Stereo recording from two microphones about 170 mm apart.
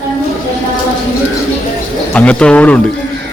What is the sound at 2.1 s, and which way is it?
Speech, 5° left (ahead or behind).